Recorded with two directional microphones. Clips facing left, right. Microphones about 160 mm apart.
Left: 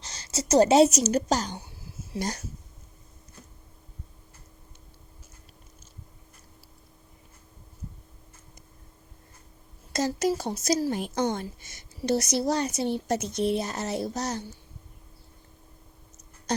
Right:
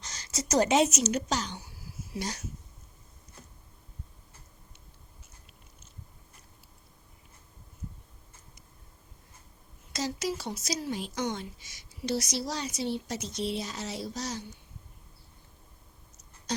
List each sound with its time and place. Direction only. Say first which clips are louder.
0.0 s a woman's voice: left 3 dB; 30° left (ahead or behind)
1.5 s a sound: left 3 dB; 25° left (ahead or behind)
2.1 s speech: left 4 dB; 45° left (ahead or behind)
10.1 s speech: left 7 dB; 45° left (ahead or behind)